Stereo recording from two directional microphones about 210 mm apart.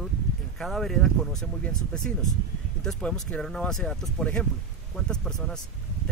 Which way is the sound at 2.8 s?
5° left (ahead or behind).